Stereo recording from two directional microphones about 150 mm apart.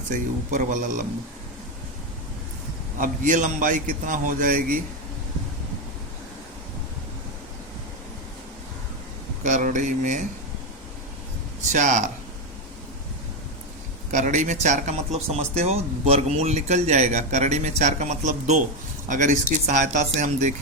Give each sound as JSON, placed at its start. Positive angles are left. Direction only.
{"t": 0.1, "sound": "a man's voice", "side_deg": -60}
{"t": 3.0, "sound": "a man's voice", "side_deg": -60}
{"t": 9.4, "sound": "a man's voice", "side_deg": -55}
{"t": 11.7, "sound": "a man's voice", "side_deg": -55}
{"t": 14.1, "sound": "a man's voice", "side_deg": -55}